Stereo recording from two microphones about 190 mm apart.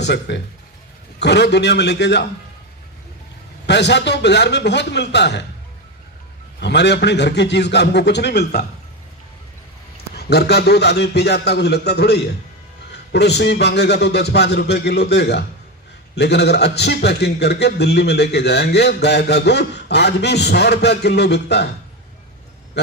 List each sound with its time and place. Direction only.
0.0 s a man's voice: 65° left (ahead or behind)
3.7 s a man's voice: 65° left (ahead or behind)
6.6 s a man's voice: 65° left (ahead or behind)
10.2 s a man's voice: 55° left (ahead or behind)